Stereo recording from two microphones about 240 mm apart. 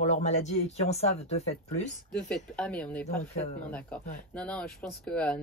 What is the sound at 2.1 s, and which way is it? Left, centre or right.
Speech, centre.